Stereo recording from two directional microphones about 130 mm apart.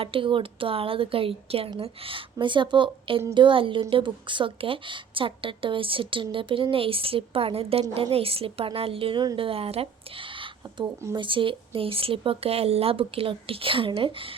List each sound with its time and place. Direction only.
0.0 s a woman's voice: 40° right (ahead or behind)
11.1 s a woman's voice: 40° right (ahead or behind)